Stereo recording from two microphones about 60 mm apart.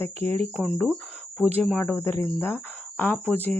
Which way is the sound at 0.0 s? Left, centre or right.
Left.